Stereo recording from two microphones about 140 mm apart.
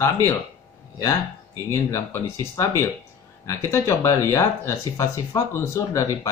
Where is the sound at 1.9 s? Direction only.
20° left (ahead or behind).